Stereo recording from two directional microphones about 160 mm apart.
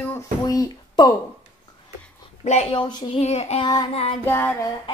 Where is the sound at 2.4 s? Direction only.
45° left (ahead or behind).